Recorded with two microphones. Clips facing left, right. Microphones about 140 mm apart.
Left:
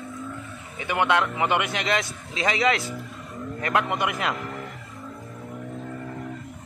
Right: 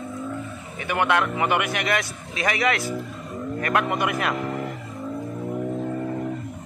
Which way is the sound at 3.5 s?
20° left (ahead or behind).